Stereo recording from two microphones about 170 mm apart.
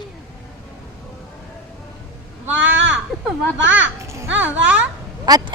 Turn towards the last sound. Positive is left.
turn(degrees=-25)  # may be behind; listen again after turning